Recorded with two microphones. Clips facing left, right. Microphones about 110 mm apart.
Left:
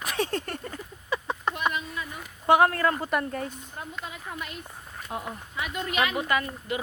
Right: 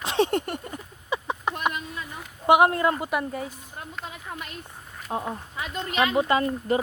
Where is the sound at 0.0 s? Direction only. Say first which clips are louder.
Right 6 dB; 25° right (ahead or behind).